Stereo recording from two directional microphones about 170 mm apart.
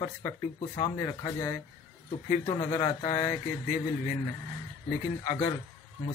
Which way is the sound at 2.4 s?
30° left (ahead or behind).